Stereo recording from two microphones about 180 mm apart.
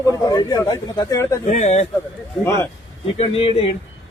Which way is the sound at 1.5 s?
40° left (ahead or behind).